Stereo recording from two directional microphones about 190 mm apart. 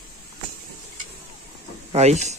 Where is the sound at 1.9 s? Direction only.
35° right (ahead or behind).